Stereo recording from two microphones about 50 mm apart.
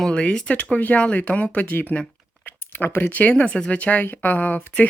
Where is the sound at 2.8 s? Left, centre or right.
Left.